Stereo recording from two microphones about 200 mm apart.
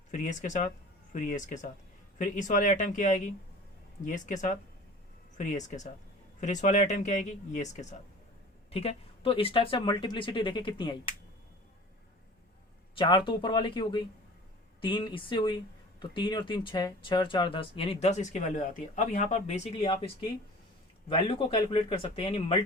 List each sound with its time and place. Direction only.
0.1 s speech: 40° left (ahead or behind); by 11.1 s 25° left (ahead or behind)
13.0 s speech: 25° left (ahead or behind)
21.1 s speech: 25° left (ahead or behind)